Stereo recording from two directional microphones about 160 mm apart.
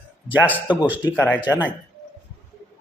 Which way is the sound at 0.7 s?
10° right (ahead or behind).